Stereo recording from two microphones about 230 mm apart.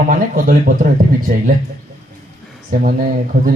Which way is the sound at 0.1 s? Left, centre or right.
Right.